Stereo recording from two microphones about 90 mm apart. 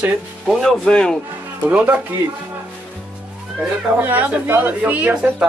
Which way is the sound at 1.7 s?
15° right (ahead or behind).